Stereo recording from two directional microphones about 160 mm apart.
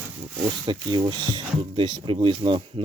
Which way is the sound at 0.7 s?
30° right (ahead or behind).